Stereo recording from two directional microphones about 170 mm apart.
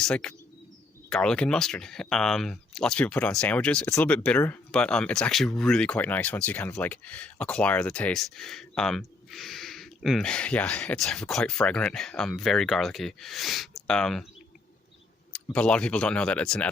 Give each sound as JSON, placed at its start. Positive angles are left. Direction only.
{"t": 0.0, "sound": "speech", "side_deg": 5}
{"t": 15.3, "sound": "speech", "side_deg": 5}